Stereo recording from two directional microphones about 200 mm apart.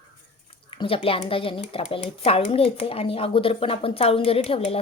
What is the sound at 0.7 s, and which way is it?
Speech, 25° left (ahead or behind).